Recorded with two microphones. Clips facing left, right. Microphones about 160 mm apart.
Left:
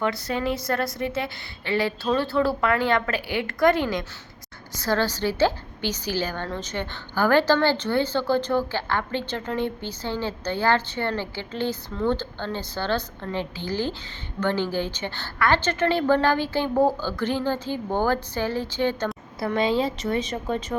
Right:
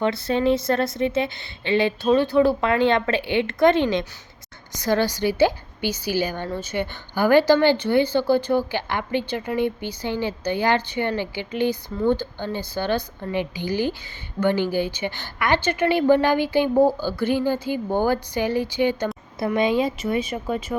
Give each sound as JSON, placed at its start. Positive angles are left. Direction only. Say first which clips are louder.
{"t": 0.0, "sound": "a woman's voice", "louder": "right 5 dB", "side_deg": -25}